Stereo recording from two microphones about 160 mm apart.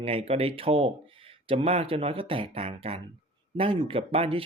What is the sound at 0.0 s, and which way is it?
Speech, 40° right (ahead or behind).